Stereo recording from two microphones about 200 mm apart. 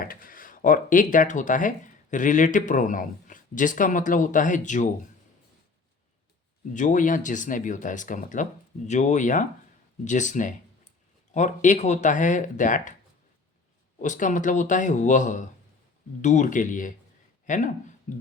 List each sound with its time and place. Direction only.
0.0 s speech: 45° left (ahead or behind)
6.7 s speech: 40° left (ahead or behind)
14.0 s speech: 40° left (ahead or behind)
17.4 s a sound: 40° left (ahead or behind)